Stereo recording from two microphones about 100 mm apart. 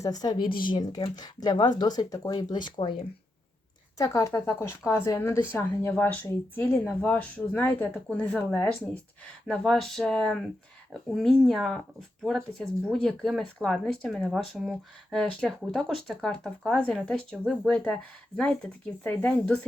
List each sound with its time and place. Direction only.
0.0 s speech: 40° left (ahead or behind)
3.9 s speech: 35° left (ahead or behind); by 8.4 s 10° left (ahead or behind)
9.5 s speech: 5° left (ahead or behind)
14.3 s speech: 5° right (ahead or behind); by 19.5 s 15° left (ahead or behind)